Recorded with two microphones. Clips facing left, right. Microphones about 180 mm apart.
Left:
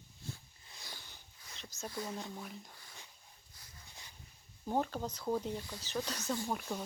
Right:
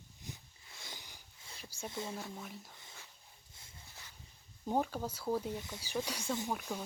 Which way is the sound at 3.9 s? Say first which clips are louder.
Left 1 dB; 15° left (ahead or behind).